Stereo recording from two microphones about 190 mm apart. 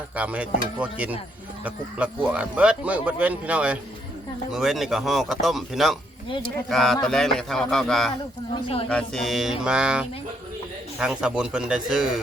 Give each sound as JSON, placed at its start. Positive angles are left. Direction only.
{"t": 0.2, "sound": "speech", "side_deg": -5}
{"t": 8.6, "sound": "a woman's voice", "side_deg": 25}
{"t": 8.9, "sound": "speech", "side_deg": 5}